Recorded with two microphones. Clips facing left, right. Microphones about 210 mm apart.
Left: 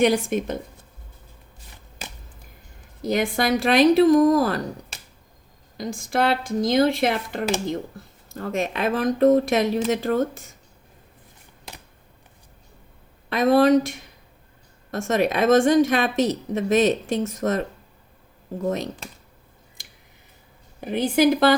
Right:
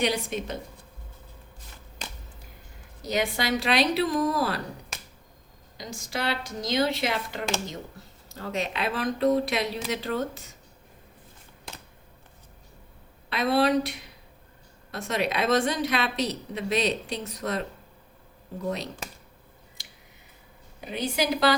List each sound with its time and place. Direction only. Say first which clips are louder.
0.0 s speech: left 8 dB; 50° left (ahead or behind)
2.0 s a sound: left 2 dB; 5° left (ahead or behind)
3.0 s speech: left 6 dB; 50° left (ahead or behind)
5.7 s speech: left 9 dB; 50° left (ahead or behind)
13.3 s speech: left 7 dB; 45° left (ahead or behind)
20.8 s speech: left 9 dB; 55° left (ahead or behind)